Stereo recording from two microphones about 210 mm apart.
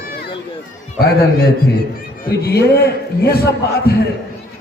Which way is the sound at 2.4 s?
50° left (ahead or behind).